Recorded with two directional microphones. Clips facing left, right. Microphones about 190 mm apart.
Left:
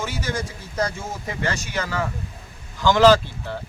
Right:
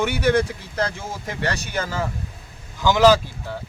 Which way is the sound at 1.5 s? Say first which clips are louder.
Right 1 dB; 60° right (ahead or behind).